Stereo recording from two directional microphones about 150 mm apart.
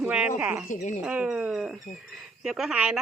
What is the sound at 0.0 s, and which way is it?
Speech, 5° right (ahead or behind).